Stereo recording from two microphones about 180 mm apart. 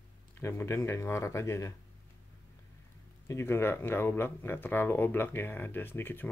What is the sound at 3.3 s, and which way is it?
Speech, 15° left (ahead or behind).